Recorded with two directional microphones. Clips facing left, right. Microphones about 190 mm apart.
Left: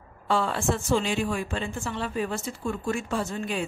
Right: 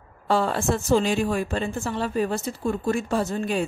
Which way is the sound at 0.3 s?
40° right (ahead or behind).